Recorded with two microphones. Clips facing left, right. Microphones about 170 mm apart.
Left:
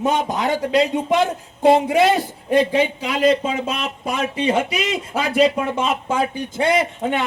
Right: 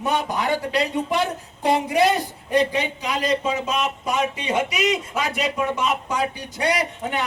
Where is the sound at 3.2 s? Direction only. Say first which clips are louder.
Left 6 dB; 25° left (ahead or behind).